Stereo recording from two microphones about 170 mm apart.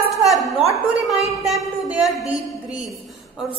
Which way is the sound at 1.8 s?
Centre (ahead or behind).